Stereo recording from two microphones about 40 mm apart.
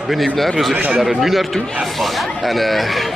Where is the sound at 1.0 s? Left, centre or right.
Centre.